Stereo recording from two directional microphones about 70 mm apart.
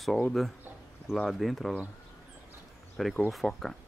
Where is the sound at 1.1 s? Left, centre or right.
Centre.